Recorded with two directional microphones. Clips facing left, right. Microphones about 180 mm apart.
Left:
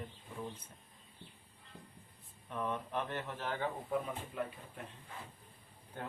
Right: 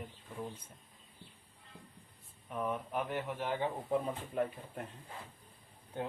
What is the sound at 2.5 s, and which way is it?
Speech, 10° right (ahead or behind).